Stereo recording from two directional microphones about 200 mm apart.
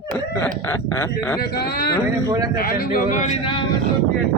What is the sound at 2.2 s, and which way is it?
Speech, 20° right (ahead or behind).